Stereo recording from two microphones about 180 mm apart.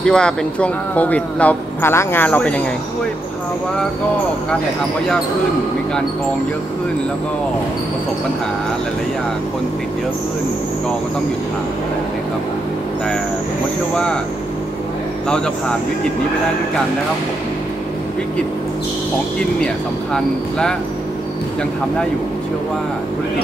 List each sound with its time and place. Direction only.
0.0 s speech: 5° left (ahead or behind)
15.2 s speech: 5° left (ahead or behind)
20.2 s speech: 5° left (ahead or behind)